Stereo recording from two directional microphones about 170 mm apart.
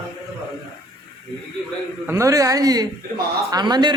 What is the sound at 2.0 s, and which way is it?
A woman's voice, 15° right (ahead or behind).